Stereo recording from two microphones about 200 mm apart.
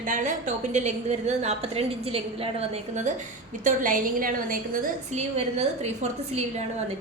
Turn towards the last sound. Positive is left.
turn(degrees=-35)  # may be behind; listen again after turning